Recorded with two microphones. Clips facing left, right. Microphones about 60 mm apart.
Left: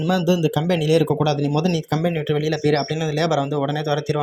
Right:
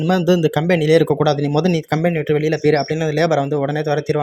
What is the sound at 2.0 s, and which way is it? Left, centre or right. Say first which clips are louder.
A man's voice: right 5 dB; right.